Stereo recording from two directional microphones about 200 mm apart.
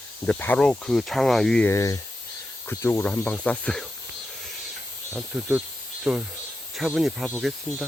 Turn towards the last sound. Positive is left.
turn(degrees=-5)  # may be behind; listen again after turning